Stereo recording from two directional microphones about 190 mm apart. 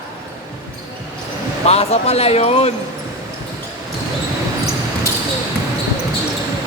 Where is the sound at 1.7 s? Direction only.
35° left (ahead or behind).